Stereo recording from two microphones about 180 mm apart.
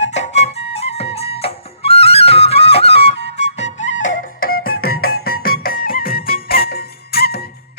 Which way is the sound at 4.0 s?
50° left (ahead or behind).